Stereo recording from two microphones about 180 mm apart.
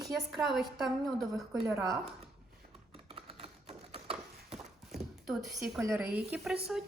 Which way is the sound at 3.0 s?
30° right (ahead or behind).